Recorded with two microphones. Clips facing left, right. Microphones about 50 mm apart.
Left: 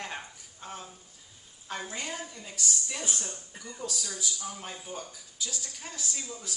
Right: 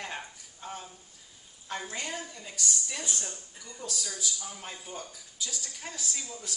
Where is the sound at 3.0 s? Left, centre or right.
Left.